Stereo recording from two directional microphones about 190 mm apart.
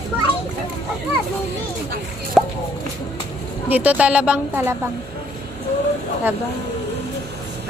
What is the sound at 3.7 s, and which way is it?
Child singing, 10° right (ahead or behind).